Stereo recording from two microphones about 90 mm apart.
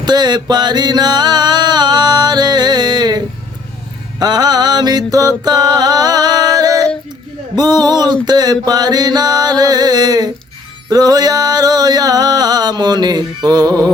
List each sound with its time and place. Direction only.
0.0 s music: 50° right (ahead or behind)